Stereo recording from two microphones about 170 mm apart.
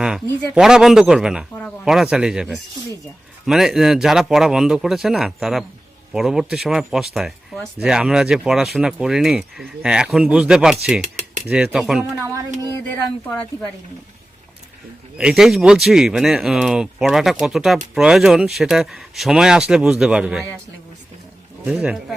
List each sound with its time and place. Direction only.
0.0 s speech: 5° right (ahead or behind)
11.0 s cutlery: 45° right (ahead or behind)
11.4 s speech: 5° right (ahead or behind)
15.2 s speech: 5° right (ahead or behind)
21.6 s speech: 5° right (ahead or behind)